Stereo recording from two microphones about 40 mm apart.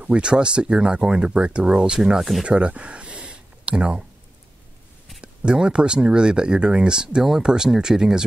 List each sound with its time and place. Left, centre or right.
0.0 s speech: right
2.0 s speech: centre
2.4 s a sound: right
5.2 s speech: right